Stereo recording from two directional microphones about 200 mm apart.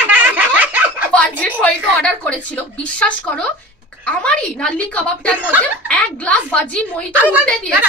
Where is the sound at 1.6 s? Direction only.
5° left (ahead or behind).